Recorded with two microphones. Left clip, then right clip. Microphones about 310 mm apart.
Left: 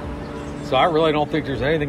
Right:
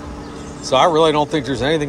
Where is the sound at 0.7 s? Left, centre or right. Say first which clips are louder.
Right 4 dB; centre.